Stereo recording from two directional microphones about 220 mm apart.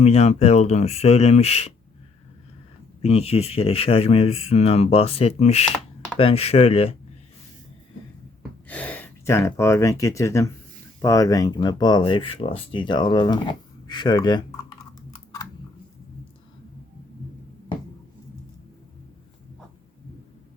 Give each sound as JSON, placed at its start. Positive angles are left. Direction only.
{"t": 0.0, "sound": "speech", "side_deg": 30}
{"t": 3.0, "sound": "speech", "side_deg": 30}
{"t": 8.6, "sound": "speech", "side_deg": 5}